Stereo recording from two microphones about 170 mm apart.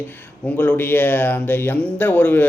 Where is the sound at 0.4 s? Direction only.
10° left (ahead or behind).